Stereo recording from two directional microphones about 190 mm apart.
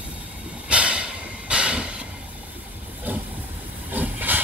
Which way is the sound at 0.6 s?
5° right (ahead or behind).